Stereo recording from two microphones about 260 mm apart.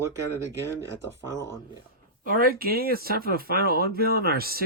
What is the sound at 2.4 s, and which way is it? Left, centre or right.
Speech, right.